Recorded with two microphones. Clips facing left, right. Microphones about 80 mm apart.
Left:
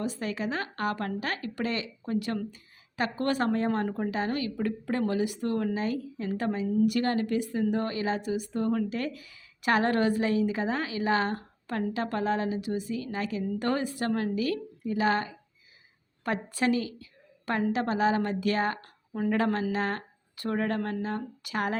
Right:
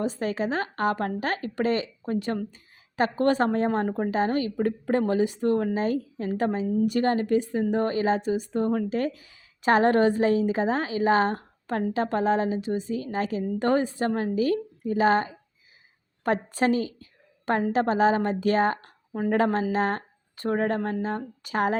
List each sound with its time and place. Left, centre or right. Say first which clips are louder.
0.0 s a woman's voice: right 5 dB; right